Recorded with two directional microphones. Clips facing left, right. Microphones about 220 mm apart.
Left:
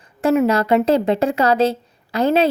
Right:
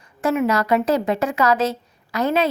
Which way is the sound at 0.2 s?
30° left (ahead or behind).